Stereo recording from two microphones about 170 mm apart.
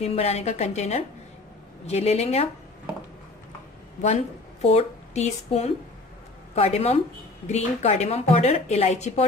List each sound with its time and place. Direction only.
0.0 s a woman's voice: 40° left (ahead or behind)
4.0 s a woman's voice: 40° left (ahead or behind)